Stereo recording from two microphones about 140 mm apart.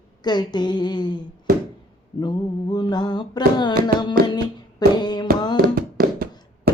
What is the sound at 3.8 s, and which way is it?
Speech, 30° left (ahead or behind).